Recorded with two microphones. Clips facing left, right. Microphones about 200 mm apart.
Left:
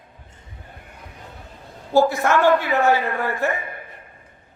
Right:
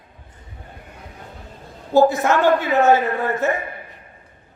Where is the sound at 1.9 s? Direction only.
20° right (ahead or behind).